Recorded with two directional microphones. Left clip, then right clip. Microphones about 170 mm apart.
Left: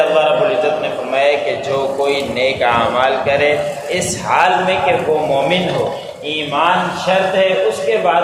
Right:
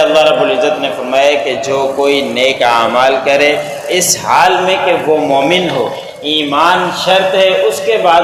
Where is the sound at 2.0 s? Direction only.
30° right (ahead or behind).